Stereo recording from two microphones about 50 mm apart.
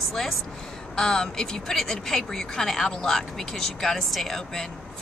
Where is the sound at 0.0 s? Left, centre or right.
Centre.